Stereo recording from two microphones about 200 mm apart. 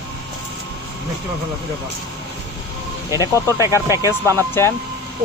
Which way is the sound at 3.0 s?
20° left (ahead or behind).